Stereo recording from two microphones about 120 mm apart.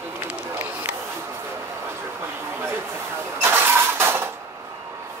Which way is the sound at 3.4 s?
20° right (ahead or behind).